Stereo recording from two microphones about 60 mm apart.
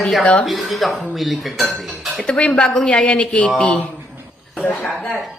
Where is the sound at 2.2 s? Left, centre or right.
Centre.